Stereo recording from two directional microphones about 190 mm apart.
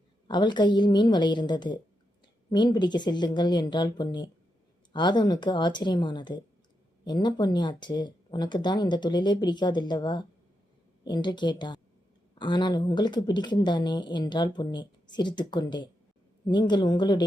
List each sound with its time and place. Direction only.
0.3 s speech: 25° left (ahead or behind)